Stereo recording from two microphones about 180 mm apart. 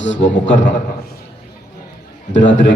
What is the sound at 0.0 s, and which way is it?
Speech, 85° left.